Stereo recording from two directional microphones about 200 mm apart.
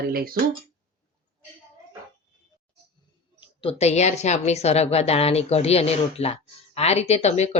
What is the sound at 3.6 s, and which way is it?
A woman's voice, 30° left (ahead or behind).